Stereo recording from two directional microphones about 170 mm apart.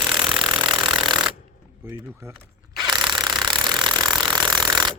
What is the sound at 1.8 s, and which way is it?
Speech, 15° right (ahead or behind).